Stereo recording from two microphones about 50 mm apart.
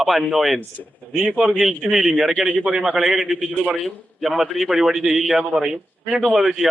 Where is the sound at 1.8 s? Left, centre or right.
Centre.